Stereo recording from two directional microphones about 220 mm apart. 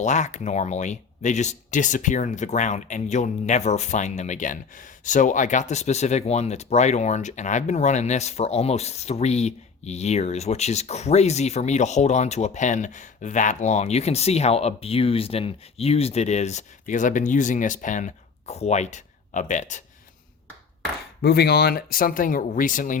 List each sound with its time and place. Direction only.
0.0 s speech: 30° left (ahead or behind)
21.2 s speech: 45° left (ahead or behind)